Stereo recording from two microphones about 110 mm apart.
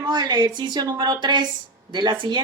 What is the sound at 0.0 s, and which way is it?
A woman's voice, 40° right (ahead or behind).